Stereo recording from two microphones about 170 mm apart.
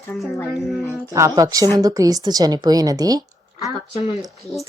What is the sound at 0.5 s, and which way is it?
Speech, centre (ahead or behind).